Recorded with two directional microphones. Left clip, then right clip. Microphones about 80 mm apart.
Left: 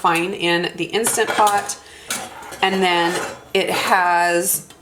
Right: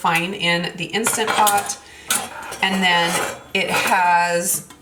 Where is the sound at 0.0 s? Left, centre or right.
Left.